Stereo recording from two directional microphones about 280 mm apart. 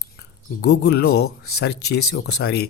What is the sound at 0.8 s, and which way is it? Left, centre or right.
A man's voice, left.